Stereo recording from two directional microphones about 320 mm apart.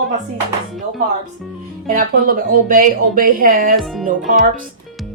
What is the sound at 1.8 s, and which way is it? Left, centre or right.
Speech, right.